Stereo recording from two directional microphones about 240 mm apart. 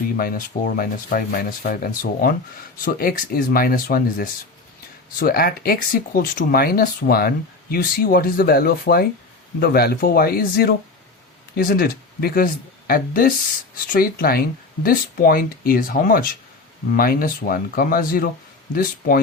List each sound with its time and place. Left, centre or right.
0.2 s speech: left